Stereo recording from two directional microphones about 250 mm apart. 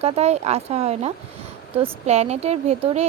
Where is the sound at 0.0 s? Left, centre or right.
Right.